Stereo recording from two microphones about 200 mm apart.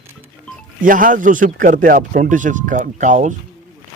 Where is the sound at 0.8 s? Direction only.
45° right (ahead or behind).